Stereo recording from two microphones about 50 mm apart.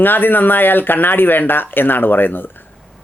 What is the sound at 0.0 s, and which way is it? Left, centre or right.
Speech, left.